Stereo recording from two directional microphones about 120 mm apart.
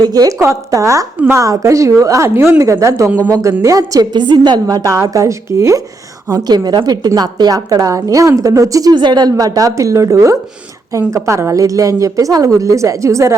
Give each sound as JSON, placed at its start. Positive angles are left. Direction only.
{"t": 0.0, "sound": "a woman's voice", "side_deg": -30}
{"t": 6.5, "sound": "a woman's voice", "side_deg": -35}